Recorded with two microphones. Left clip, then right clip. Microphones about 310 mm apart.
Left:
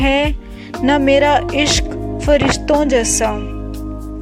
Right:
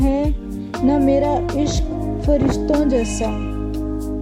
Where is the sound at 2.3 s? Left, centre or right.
Left.